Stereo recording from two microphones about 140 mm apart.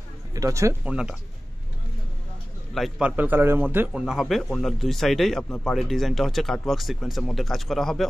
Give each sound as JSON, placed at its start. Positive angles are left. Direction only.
{"t": 0.3, "sound": "speech", "side_deg": -25}
{"t": 0.8, "sound": "a man's voice", "side_deg": -5}
{"t": 2.7, "sound": "a man's voice", "side_deg": -5}
{"t": 4.0, "sound": "a man's voice", "side_deg": 0}